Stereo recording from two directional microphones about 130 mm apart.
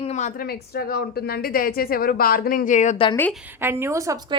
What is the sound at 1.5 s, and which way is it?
Speech, 90° left.